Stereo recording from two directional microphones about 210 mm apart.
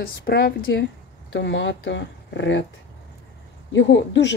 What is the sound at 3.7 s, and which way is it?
Speech, 60° left (ahead or behind).